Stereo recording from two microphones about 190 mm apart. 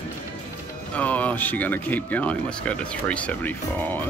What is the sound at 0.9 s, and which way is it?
Speech, 10° left (ahead or behind).